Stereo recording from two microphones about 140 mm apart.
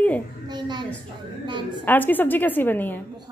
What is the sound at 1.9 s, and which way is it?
Speech, 15° left (ahead or behind).